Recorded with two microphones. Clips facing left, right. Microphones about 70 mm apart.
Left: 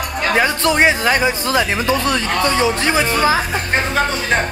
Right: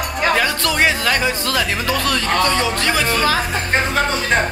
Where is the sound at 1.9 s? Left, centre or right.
Left.